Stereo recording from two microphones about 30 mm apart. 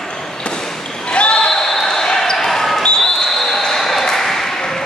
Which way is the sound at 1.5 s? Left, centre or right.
Centre.